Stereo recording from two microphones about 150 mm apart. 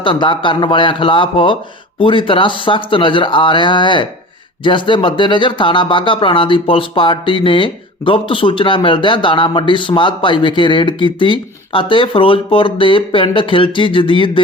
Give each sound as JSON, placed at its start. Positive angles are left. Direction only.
{"t": 0.0, "sound": "speech", "side_deg": 35}